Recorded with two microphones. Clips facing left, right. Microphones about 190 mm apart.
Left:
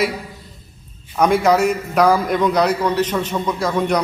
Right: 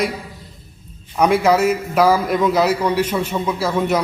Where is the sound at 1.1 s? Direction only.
5° right (ahead or behind).